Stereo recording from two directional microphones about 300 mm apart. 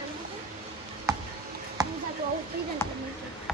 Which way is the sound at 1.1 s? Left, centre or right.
Centre.